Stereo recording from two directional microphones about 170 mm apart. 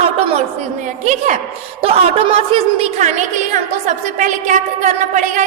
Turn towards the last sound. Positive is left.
turn(degrees=-45)  # may be behind; listen again after turning